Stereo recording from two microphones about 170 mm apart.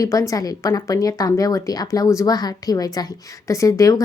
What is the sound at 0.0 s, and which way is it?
A woman's voice, 20° left (ahead or behind).